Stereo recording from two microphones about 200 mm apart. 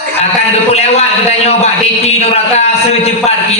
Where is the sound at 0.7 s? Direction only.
30° left (ahead or behind).